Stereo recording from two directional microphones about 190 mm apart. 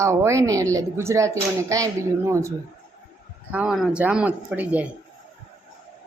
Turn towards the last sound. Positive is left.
turn(degrees=-5)  # may be behind; listen again after turning